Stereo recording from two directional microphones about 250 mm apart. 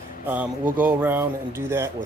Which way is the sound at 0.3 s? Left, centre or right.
Centre.